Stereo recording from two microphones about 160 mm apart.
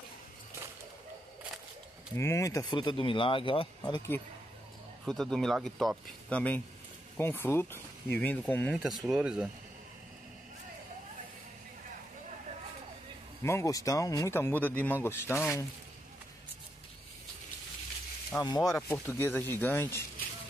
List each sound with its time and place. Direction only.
2.1 s speech: 15° left (ahead or behind)
5.0 s speech: 5° left (ahead or behind)
8.7 s speech: centre (ahead or behind)
13.4 s speech: 15° left (ahead or behind)
18.4 s speech: 25° left (ahead or behind)